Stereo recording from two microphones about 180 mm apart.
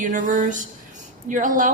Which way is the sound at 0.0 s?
45° right (ahead or behind).